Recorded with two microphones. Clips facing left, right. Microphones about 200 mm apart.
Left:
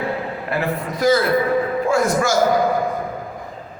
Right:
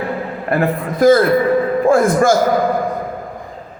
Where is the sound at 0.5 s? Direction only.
50° right (ahead or behind).